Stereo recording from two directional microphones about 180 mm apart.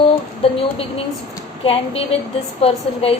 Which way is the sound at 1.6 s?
35° left (ahead or behind).